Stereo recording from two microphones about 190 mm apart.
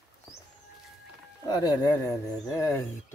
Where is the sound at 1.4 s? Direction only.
20° left (ahead or behind).